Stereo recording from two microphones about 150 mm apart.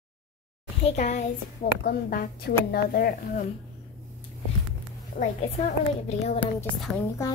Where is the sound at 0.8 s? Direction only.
50° left (ahead or behind).